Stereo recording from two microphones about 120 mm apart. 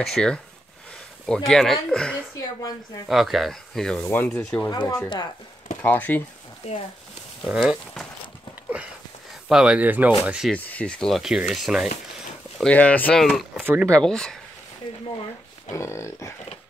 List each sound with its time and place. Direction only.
0.0 s rub: 5° left (ahead or behind)
4.0 s speech: 15° left (ahead or behind)
4.6 s speech: 30° left (ahead or behind)
5.8 s speech: 15° left (ahead or behind)
6.6 s speech: 65° left (ahead or behind)
7.4 s rub: centre (ahead or behind)
9.5 s speech: 5° right (ahead or behind)
10.5 s rub: 10° left (ahead or behind)
12.6 s speech: 10° left (ahead or behind)
13.2 s rub: centre (ahead or behind)
15.7 s speech: 25° left (ahead or behind)